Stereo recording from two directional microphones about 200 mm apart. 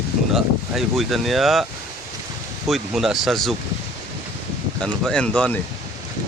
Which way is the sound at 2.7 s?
Centre (ahead or behind).